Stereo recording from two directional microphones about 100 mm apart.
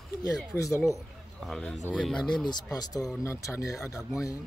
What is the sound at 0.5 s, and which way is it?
Speech, 35° left (ahead or behind).